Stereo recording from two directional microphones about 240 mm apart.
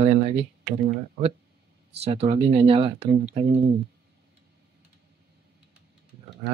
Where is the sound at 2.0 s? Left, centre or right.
Right.